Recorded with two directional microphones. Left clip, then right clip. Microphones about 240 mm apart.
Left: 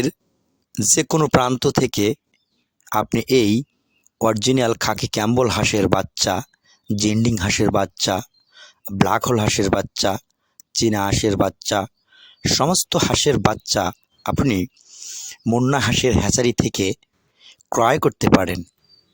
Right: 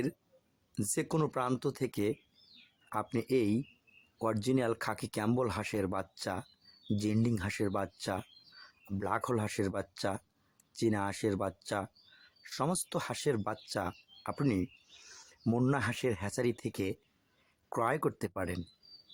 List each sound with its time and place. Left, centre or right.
0.7 s speech: left